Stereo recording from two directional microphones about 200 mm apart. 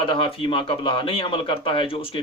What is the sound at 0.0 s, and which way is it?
Speech, 25° left (ahead or behind).